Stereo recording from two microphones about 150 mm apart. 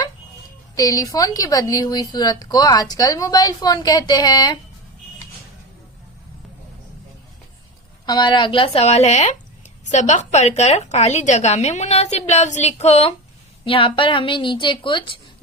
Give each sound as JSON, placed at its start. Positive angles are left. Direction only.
{"t": 0.8, "sound": "a woman's voice", "side_deg": 25}
{"t": 8.0, "sound": "a woman's voice", "side_deg": 30}